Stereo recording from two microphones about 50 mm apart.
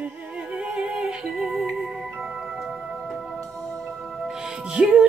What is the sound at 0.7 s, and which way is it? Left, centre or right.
Music, centre.